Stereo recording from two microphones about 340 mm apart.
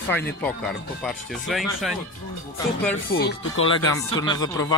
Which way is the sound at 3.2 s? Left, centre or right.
Left.